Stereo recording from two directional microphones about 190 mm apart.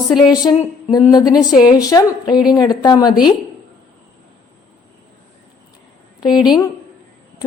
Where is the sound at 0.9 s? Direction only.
20° left (ahead or behind).